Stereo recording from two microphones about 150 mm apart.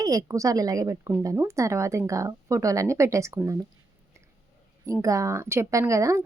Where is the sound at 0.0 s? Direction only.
20° right (ahead or behind).